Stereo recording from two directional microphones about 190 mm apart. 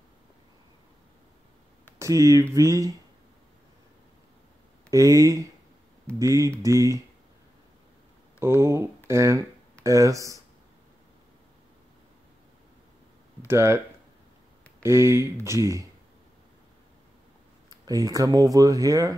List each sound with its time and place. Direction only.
2.0 s speech: 15° right (ahead or behind)
4.9 s speech: 15° right (ahead or behind)
8.4 s speech: 15° right (ahead or behind)
13.5 s speech: 15° right (ahead or behind)
14.8 s speech: 15° right (ahead or behind)
17.6 s speech: 20° right (ahead or behind)